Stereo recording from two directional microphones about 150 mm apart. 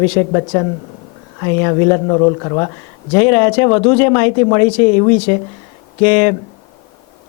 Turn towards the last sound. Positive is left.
turn(degrees=15)  # may be behind; listen again after turning